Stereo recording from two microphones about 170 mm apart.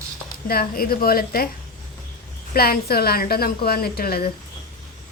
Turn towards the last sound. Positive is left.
turn(degrees=65)  # may be behind; listen again after turning